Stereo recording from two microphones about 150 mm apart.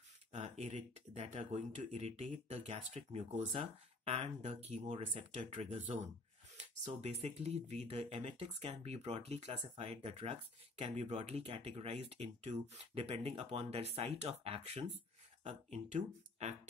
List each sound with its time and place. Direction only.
0.3 s speech: 50° right (ahead or behind)